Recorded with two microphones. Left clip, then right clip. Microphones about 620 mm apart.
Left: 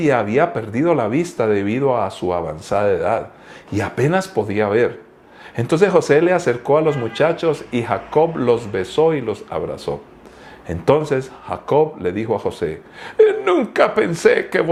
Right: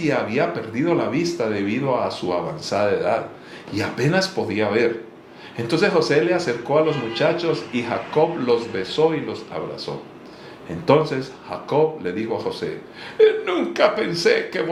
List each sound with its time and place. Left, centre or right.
0.0 s speech: left